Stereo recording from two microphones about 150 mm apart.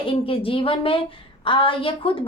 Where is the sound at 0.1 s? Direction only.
35° left (ahead or behind).